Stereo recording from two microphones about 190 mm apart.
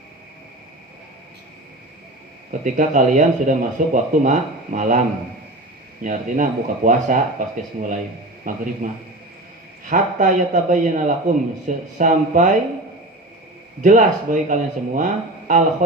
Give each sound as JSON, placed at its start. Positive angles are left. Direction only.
{"t": 2.5, "sound": "speech", "side_deg": -40}
{"t": 6.0, "sound": "speech", "side_deg": -45}
{"t": 13.8, "sound": "speech", "side_deg": -45}